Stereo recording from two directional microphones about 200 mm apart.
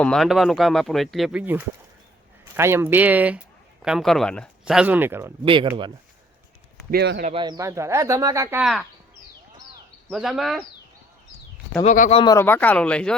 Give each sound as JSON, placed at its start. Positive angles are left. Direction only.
{"t": 0.0, "sound": "speech", "side_deg": 0}
{"t": 5.5, "sound": "speech", "side_deg": -25}
{"t": 6.9, "sound": "speech", "side_deg": -50}
{"t": 7.3, "sound": "speech", "side_deg": -25}
{"t": 8.6, "sound": "speech", "side_deg": 0}
{"t": 10.1, "sound": "speech", "side_deg": 0}
{"t": 11.8, "sound": "speech", "side_deg": 35}
{"t": 12.2, "sound": "speech", "side_deg": 15}